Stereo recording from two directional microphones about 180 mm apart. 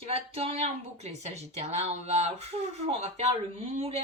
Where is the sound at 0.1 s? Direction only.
35° right (ahead or behind).